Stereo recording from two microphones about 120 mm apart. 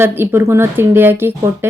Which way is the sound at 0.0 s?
20° right (ahead or behind).